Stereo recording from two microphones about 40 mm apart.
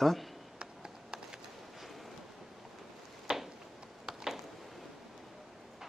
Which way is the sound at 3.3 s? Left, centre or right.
Right.